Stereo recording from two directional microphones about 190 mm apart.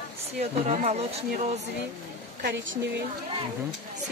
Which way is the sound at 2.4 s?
60° right (ahead or behind).